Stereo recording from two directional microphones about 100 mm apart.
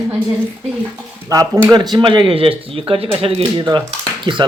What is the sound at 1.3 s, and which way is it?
Speech, 35° right (ahead or behind).